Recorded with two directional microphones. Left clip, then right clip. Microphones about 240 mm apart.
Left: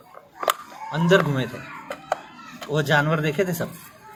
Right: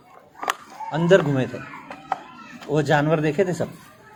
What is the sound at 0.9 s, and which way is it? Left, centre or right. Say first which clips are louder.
Speech: right 2 dB; centre.